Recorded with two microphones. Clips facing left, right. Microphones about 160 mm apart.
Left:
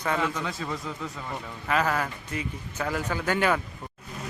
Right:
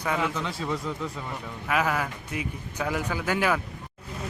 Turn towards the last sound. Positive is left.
turn(degrees=-5)  # may be behind; listen again after turning